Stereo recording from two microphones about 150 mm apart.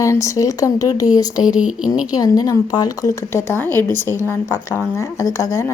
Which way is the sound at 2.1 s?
25° left (ahead or behind).